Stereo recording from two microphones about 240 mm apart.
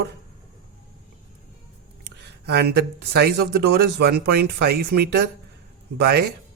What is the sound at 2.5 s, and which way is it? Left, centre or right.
A man's voice, right.